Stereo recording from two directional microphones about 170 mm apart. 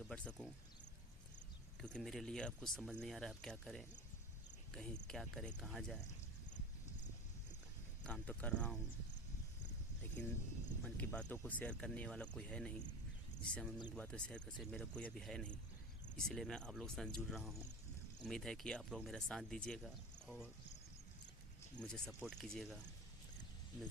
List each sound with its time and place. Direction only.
0.0 s speech: centre (ahead or behind)
1.8 s speech: 5° left (ahead or behind)
8.0 s speech: 5° left (ahead or behind)
10.2 s speech: 10° left (ahead or behind)
21.8 s speech: 5° left (ahead or behind)